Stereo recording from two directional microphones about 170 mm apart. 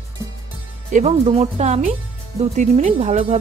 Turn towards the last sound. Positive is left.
turn(degrees=-40)  # may be behind; listen again after turning